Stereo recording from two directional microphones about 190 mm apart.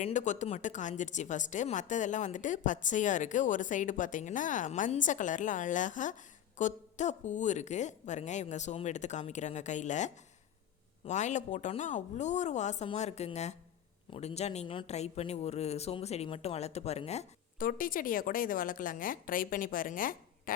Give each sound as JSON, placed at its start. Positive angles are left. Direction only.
{"t": 0.0, "sound": "a woman's voice", "side_deg": 40}
{"t": 17.7, "sound": "a woman's voice", "side_deg": 45}